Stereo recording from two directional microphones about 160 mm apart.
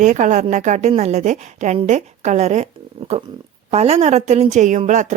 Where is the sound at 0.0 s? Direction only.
50° right (ahead or behind).